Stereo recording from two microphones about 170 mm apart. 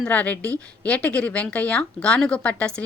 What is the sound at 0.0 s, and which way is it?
A woman's voice, 10° left (ahead or behind).